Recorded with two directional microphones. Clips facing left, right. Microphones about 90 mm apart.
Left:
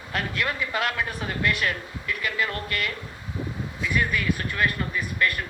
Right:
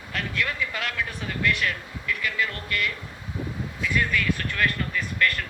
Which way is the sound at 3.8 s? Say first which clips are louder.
Even; 15° left (ahead or behind).